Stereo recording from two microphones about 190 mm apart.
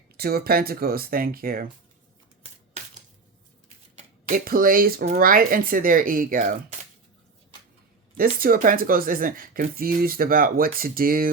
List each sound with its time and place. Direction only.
0.2 s speech: 55° right (ahead or behind)
3.9 s speech: 45° right (ahead or behind)
8.1 s speech: 50° right (ahead or behind)